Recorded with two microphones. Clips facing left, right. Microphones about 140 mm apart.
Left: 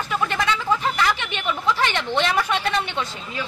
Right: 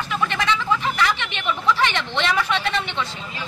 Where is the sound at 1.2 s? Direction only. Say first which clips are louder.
Even; 45° left (ahead or behind).